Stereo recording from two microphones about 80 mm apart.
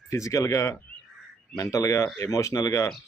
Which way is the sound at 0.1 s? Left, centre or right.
Left.